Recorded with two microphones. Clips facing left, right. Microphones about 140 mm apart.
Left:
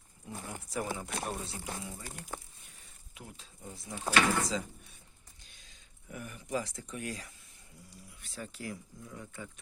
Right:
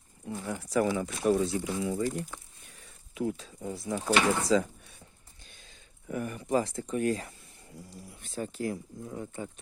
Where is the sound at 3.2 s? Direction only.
85° right.